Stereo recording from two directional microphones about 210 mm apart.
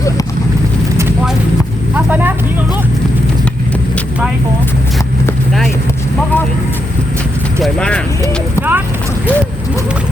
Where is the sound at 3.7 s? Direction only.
5° left (ahead or behind).